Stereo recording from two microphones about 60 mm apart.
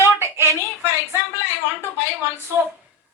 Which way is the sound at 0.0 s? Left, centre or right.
Right.